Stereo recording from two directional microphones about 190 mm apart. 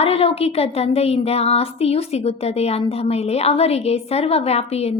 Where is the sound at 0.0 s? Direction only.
30° left (ahead or behind).